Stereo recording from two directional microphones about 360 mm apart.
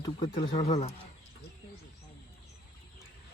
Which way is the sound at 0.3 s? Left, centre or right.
Centre.